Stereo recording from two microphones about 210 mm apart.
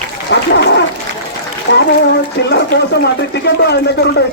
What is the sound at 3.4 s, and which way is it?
Speech, 55° left (ahead or behind).